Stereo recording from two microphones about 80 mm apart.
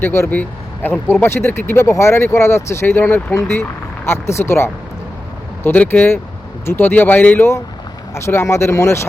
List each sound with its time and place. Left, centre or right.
0.0 s speech: left
0.3 s speech: left
8.1 s speech: left